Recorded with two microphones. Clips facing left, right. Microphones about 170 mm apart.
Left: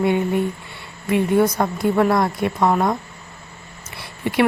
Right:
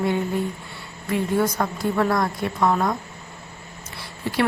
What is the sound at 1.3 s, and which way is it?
Speech, 20° left (ahead or behind).